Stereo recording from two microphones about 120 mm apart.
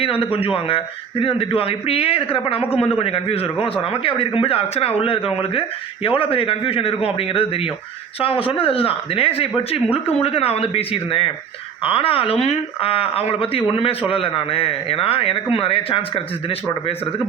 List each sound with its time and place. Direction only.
0.0 s speech: 50° left (ahead or behind)